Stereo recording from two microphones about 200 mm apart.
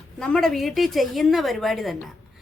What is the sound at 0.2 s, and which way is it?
A woman's voice, 5° left (ahead or behind).